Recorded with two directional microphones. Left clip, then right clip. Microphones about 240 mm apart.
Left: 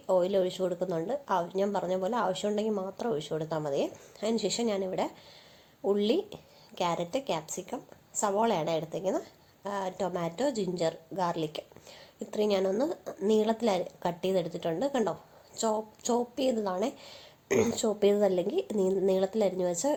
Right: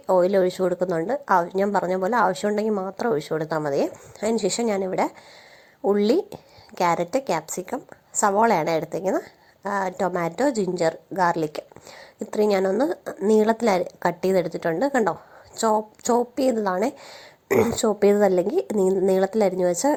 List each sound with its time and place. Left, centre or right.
0.1 s a woman's voice: right
13.1 s speech: centre
13.4 s a woman's voice: right
18.8 s speech: centre
19.0 s a woman's voice: right